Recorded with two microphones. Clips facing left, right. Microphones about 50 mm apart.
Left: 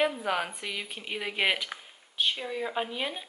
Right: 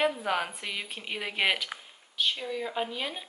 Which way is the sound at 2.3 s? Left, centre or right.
Centre.